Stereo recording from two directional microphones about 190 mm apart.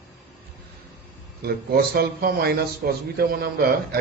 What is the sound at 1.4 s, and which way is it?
A man's voice, 55° right (ahead or behind).